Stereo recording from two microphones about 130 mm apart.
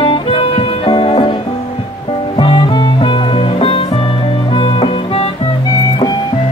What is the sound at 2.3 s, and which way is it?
Music, 40° left (ahead or behind).